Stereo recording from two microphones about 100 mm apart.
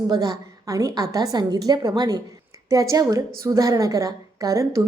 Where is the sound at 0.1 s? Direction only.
40° right (ahead or behind).